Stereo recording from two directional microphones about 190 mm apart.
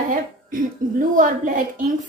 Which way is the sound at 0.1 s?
45° right (ahead or behind).